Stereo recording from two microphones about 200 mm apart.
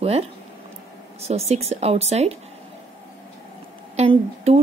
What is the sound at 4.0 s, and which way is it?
Speech, 30° right (ahead or behind).